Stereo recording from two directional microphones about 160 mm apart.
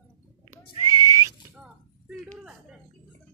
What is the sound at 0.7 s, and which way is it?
Whistle, 20° right (ahead or behind).